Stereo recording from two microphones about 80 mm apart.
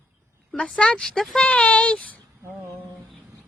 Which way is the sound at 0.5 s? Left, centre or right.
Centre.